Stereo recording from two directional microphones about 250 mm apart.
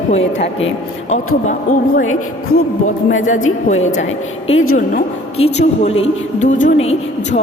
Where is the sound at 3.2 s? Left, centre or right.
Left.